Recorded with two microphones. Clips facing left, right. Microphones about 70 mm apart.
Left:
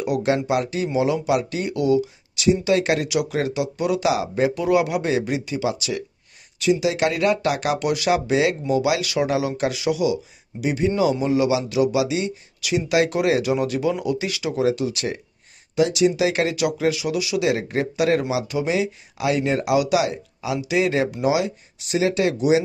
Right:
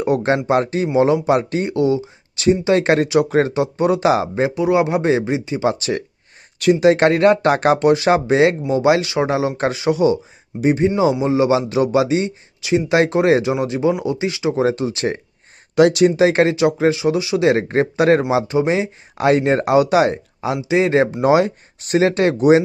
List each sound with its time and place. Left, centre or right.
0.0 s speech: right
4.5 s speech: right
5.7 s speech: right
12.6 s speech: right
15.7 s speech: right
16.1 s speech: right